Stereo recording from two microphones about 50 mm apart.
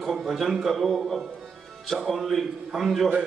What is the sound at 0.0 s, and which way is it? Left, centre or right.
A man's voice, centre.